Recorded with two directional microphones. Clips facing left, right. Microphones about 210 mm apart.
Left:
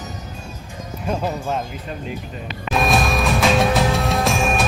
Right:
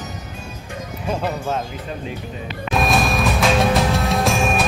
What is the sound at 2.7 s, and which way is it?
Music, centre (ahead or behind).